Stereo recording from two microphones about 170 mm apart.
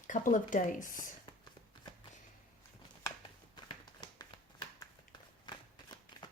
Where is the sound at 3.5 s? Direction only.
25° left (ahead or behind).